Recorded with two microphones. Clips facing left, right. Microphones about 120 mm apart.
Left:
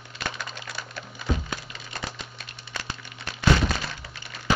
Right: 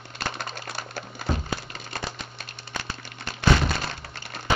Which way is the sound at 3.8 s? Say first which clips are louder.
Right 2 dB; 55° right (ahead or behind).